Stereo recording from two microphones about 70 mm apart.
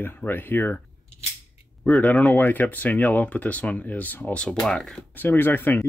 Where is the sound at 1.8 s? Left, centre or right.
Centre.